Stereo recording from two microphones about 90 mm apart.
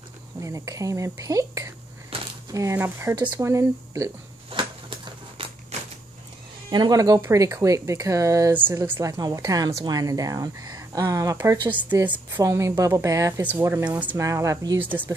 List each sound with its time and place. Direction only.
0.4 s a woman's voice: 35° right (ahead or behind)
2.1 s a sound: 90° right
2.5 s a woman's voice: 35° right (ahead or behind)
4.5 s a sound: 80° right
5.4 s a sound: 90° right
6.7 s speech: 50° right (ahead or behind)
7.2 s a woman's voice: 30° right (ahead or behind)
8.5 s speech: 20° right (ahead or behind)
9.0 s a woman's voice: 40° right (ahead or behind)
11.7 s speech: 20° right (ahead or behind)
12.4 s a woman's voice: 35° right (ahead or behind)
13.4 s speech: 20° right (ahead or behind)
14.1 s a woman's voice: 35° right (ahead or behind)
14.8 s speech: 20° right (ahead or behind)